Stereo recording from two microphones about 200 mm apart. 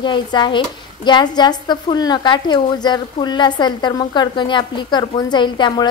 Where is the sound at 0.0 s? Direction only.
20° left (ahead or behind).